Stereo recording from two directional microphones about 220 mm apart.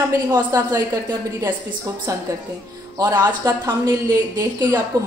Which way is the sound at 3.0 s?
15° right (ahead or behind).